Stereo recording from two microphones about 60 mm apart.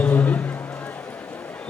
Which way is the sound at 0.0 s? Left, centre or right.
Left.